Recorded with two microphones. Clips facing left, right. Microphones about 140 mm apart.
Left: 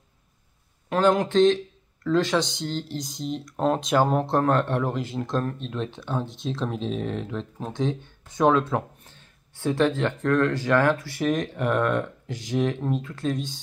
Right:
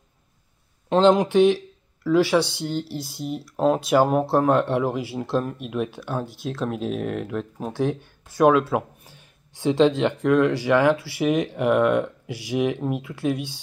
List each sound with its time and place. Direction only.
0.8 s speech: 25° right (ahead or behind)